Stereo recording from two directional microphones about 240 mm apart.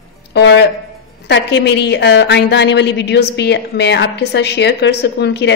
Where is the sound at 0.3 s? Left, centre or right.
Left.